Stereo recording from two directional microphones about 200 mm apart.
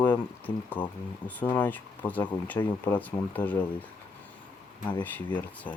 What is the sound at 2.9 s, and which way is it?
Speech, 10° left (ahead or behind).